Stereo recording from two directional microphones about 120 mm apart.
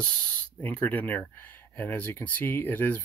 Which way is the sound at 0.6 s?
15° left (ahead or behind).